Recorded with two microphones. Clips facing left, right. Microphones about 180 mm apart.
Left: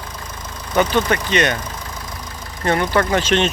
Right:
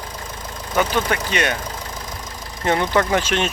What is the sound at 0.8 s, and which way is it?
Speech, 5° right (ahead or behind).